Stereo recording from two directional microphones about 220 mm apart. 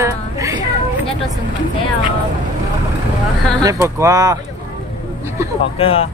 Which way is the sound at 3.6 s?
15° right (ahead or behind).